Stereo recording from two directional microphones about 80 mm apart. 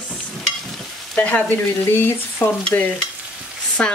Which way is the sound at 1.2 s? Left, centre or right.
Centre.